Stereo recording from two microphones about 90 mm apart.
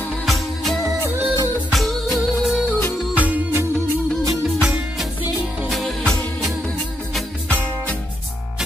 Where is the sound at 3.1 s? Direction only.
15° right (ahead or behind).